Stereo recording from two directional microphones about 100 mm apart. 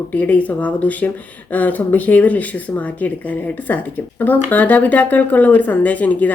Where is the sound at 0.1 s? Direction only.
15° left (ahead or behind).